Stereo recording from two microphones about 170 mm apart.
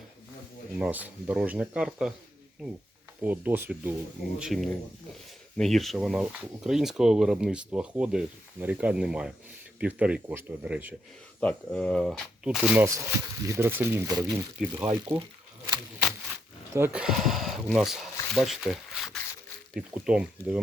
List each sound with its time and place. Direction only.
0.8 s speech: 10° right (ahead or behind)
3.2 s speech: 10° right (ahead or behind)
4.4 s speech: centre (ahead or behind)
11.3 s speech: 5° left (ahead or behind)
12.8 s speech: 15° right (ahead or behind)
14.8 s speech: 10° right (ahead or behind)
16.7 s speech: 10° right (ahead or behind)